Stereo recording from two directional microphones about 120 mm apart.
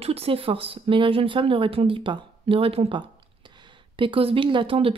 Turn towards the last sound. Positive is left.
turn(degrees=-50)  # may be behind; listen again after turning